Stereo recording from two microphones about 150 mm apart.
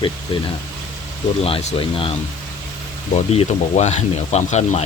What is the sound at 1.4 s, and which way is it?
Speech, 40° left (ahead or behind).